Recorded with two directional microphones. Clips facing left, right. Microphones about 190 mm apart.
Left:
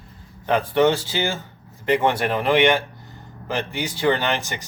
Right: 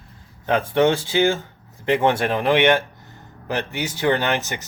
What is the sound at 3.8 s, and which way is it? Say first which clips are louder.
Speech: even; 15° right (ahead or behind).